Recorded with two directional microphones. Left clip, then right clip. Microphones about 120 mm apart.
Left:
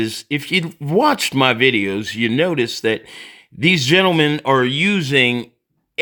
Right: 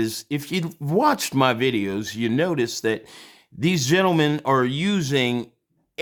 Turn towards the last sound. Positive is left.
turn(degrees=35)  # may be behind; listen again after turning